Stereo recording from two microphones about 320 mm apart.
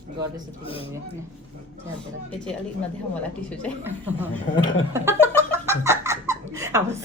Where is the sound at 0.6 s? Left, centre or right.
Centre.